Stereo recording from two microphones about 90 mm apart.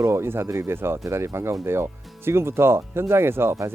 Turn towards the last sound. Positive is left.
turn(degrees=-30)  # may be behind; listen again after turning